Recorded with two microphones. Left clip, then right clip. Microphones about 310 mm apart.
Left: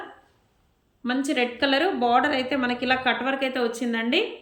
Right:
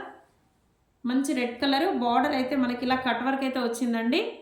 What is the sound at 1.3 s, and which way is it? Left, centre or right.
A woman's voice, centre.